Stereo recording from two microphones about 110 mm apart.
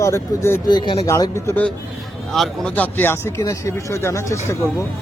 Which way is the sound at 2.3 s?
Centre (ahead or behind).